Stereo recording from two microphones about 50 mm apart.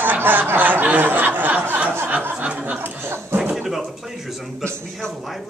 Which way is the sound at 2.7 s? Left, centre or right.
Right.